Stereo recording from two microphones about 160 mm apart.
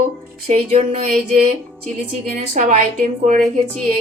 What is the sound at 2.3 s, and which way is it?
A woman's voice, 55° right (ahead or behind).